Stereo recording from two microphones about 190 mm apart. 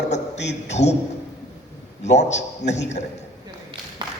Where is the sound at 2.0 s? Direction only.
35° left (ahead or behind).